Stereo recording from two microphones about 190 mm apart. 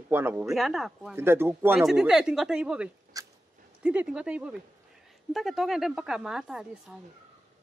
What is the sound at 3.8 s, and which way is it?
Speech, 5° right (ahead or behind).